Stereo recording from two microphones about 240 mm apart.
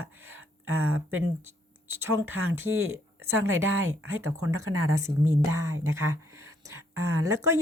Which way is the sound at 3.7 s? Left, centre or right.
Right.